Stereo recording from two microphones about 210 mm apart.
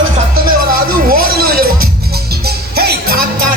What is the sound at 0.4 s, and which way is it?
Music, 45° right (ahead or behind).